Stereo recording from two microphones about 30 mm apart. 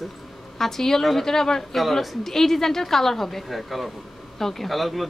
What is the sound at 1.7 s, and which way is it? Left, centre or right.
Speech, centre.